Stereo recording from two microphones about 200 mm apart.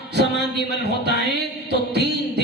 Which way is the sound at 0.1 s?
55° right (ahead or behind).